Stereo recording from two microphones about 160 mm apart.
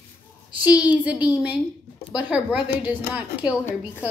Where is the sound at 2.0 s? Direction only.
25° left (ahead or behind).